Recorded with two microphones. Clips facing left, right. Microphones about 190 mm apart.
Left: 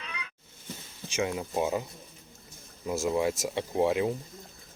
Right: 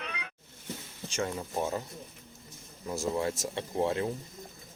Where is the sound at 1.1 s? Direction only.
10° left (ahead or behind).